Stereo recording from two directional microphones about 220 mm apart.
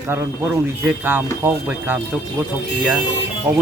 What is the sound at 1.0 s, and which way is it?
Speech, 10° right (ahead or behind).